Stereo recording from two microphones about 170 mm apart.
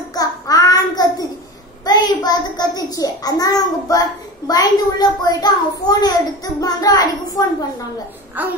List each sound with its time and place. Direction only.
0.1 s child singing: 20° left (ahead or behind)
1.9 s a child's voice: 25° left (ahead or behind)
8.4 s babbling: 10° right (ahead or behind)